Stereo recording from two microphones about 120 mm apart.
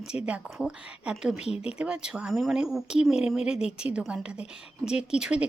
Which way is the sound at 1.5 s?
55° left (ahead or behind).